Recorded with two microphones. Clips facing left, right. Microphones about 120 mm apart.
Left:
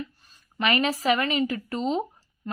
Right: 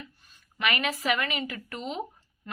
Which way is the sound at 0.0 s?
30° left (ahead or behind).